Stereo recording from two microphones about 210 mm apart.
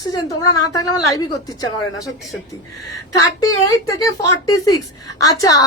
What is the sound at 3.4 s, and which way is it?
A woman's voice, 15° left (ahead or behind).